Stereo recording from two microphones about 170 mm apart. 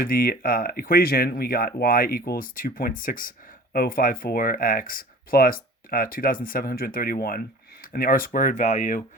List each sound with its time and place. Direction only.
0.0 s speech: 60° left (ahead or behind)